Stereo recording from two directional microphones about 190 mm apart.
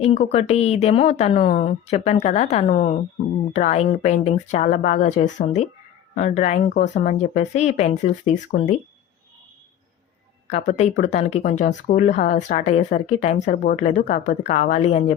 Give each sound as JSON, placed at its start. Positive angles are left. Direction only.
{"t": 0.0, "sound": "speech", "side_deg": 35}
{"t": 10.5, "sound": "speech", "side_deg": 35}